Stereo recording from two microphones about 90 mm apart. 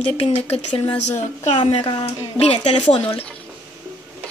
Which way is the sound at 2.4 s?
80° left.